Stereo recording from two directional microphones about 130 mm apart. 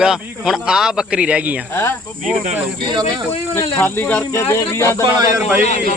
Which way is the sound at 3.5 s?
20° left (ahead or behind).